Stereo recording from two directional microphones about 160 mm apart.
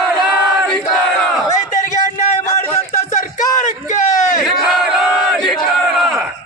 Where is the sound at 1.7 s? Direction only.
50° left (ahead or behind).